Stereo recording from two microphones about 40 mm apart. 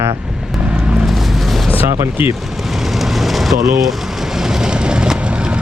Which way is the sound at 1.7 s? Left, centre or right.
Right.